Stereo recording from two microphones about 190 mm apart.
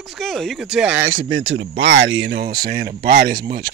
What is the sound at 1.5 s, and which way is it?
Speech, 85° right.